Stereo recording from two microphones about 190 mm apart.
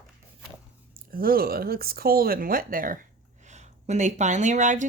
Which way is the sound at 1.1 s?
50° right (ahead or behind).